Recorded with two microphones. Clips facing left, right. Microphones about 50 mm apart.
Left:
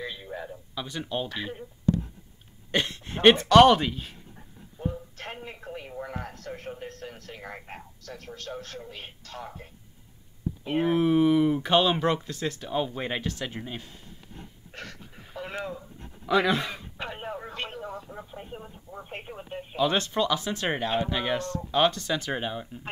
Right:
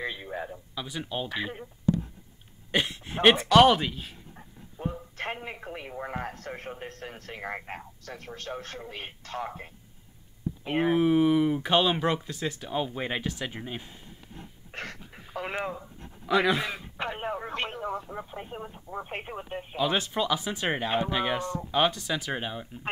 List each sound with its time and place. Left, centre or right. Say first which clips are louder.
0.0 s a man's voice: right 2 dB; right
0.7 s speech: left 2 dB; centre
2.7 s speech: even; centre
4.4 s dog: left 1 dB; right
5.1 s a man's voice: right 4 dB; right
10.6 s speech: even; centre
10.9 s speech: left 1 dB; centre
14.7 s a sound: right 4 dB; right
16.3 s speech: left 1 dB; centre
16.9 s music: right 3 dB; right
17.5 s telephone: right 4 dB; right
18.6 s speech: right 5 dB; right
19.7 s speech: left 2 dB; centre